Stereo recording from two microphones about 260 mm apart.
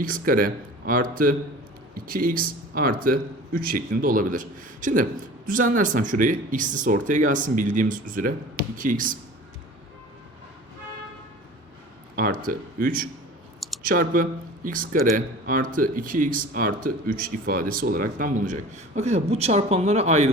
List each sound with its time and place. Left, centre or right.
0.0 s speech: right
12.1 s a man's voice: right